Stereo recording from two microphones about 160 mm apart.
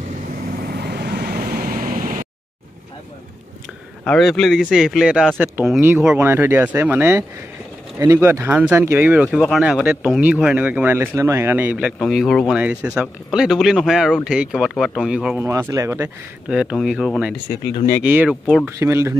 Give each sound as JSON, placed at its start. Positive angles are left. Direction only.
{"t": 0.5, "sound": "vehicle", "side_deg": -70}
{"t": 4.0, "sound": "speech", "side_deg": 5}
{"t": 16.4, "sound": "speech", "side_deg": -5}